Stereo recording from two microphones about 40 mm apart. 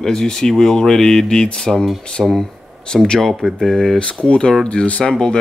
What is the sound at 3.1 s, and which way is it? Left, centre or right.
Speech, centre.